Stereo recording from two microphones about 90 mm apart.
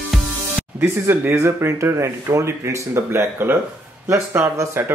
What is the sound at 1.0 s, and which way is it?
Speech, 25° right (ahead or behind).